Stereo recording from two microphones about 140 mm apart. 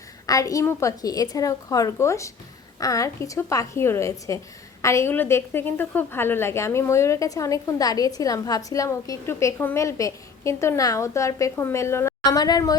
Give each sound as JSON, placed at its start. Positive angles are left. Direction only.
{"t": 0.3, "sound": "a woman's voice", "side_deg": 25}